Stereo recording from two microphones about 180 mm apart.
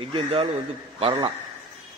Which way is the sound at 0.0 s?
30° right (ahead or behind).